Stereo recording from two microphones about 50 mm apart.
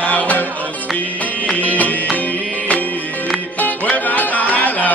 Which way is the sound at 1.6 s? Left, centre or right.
Left.